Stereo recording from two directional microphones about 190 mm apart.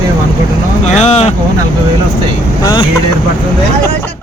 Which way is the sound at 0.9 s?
35° left (ahead or behind).